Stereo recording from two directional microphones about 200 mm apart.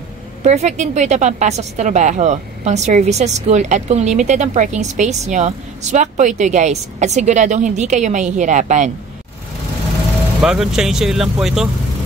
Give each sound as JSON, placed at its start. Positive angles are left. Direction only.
{"t": 0.4, "sound": "a woman's voice", "side_deg": -35}
{"t": 10.4, "sound": "speech", "side_deg": -5}